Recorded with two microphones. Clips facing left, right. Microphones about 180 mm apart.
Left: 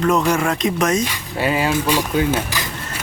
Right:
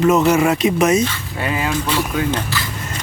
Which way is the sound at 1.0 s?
10° left (ahead or behind).